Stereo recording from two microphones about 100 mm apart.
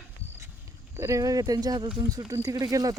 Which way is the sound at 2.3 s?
35° right (ahead or behind).